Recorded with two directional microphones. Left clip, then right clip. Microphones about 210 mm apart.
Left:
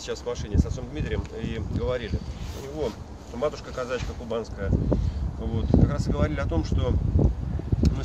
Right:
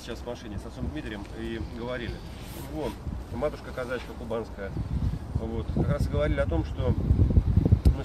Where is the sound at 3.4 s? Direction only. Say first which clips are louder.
Left 3 dB; 25° left (ahead or behind).